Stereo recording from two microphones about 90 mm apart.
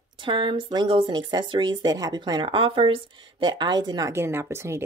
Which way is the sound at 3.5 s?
50° right (ahead or behind).